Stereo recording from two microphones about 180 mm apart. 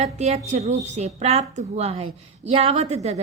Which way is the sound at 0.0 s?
35° right (ahead or behind).